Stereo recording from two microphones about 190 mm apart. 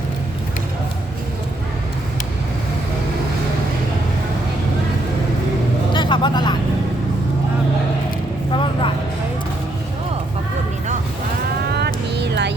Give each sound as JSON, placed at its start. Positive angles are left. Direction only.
{"t": 5.9, "sound": "vehicle", "side_deg": 25}
{"t": 8.5, "sound": "vehicle", "side_deg": 25}
{"t": 11.7, "sound": "a sound", "side_deg": -60}